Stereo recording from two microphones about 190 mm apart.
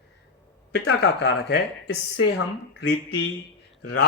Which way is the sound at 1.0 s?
65° left (ahead or behind).